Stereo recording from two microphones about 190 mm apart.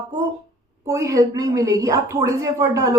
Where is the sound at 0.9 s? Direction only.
15° right (ahead or behind).